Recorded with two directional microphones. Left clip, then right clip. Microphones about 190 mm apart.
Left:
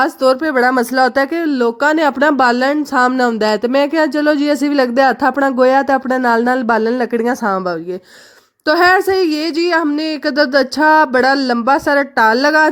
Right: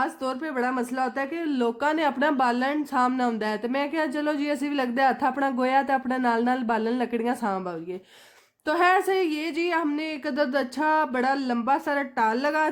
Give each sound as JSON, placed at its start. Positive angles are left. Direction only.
{"t": 0.0, "sound": "speech", "side_deg": 45}